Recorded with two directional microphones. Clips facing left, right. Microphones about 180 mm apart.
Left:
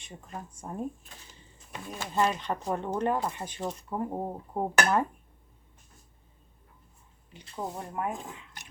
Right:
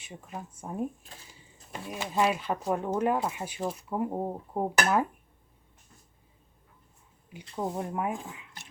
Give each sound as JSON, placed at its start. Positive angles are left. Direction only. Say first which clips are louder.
{"t": 0.0, "sound": "speech", "louder": "right 1 dB", "side_deg": -5}
{"t": 1.9, "sound": "speech", "louder": "right 1 dB", "side_deg": -10}
{"t": 7.3, "sound": "speech", "louder": "right 4 dB", "side_deg": -10}